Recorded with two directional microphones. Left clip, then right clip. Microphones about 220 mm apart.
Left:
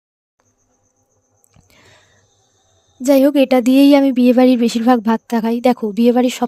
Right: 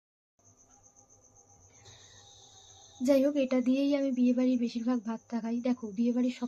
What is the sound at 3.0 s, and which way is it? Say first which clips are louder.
Speech: left 14 dB; 45° left (ahead or behind).